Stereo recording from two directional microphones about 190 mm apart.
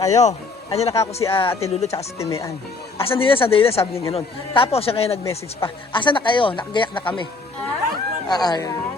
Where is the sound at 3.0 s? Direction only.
30° left (ahead or behind).